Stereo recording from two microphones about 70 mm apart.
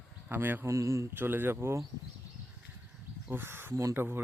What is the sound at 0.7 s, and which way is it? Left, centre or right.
Speech, right.